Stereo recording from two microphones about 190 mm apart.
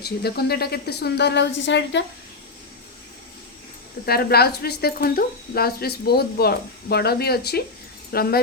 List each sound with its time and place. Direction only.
0.0 s speech: 55° left (ahead or behind)
4.0 s speech: 55° left (ahead or behind)